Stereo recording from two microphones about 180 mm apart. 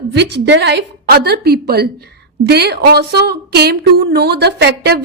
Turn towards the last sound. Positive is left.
turn(degrees=-65)  # may be behind; listen again after turning